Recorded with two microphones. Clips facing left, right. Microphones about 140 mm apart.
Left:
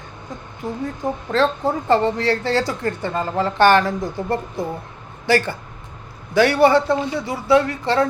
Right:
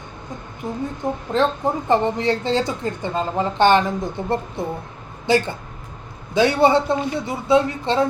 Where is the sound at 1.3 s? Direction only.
20° right (ahead or behind).